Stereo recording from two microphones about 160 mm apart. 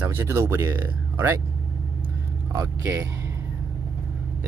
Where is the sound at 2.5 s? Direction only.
15° right (ahead or behind).